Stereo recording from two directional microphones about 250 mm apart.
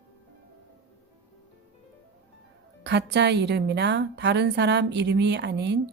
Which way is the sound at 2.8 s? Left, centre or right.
Right.